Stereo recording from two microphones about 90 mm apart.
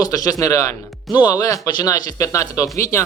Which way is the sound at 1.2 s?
50° left (ahead or behind).